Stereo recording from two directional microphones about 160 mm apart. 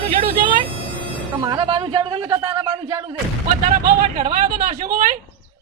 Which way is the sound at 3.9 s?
60° right (ahead or behind).